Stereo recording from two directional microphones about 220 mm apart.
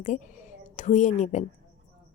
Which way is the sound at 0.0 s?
35° left (ahead or behind).